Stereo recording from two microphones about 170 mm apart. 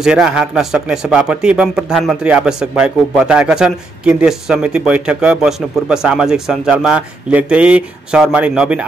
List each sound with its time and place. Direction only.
0.0 s speech: 5° right (ahead or behind)